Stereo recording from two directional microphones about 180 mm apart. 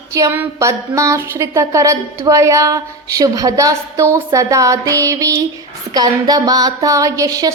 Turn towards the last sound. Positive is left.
turn(degrees=-20)  # may be behind; listen again after turning